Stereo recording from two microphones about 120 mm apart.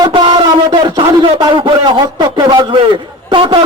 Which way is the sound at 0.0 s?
45° right (ahead or behind).